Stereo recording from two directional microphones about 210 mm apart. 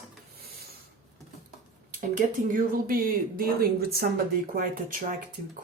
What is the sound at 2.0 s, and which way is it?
Speech, 40° right (ahead or behind).